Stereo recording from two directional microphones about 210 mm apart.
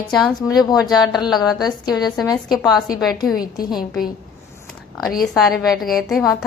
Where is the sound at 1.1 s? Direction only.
Centre (ahead or behind).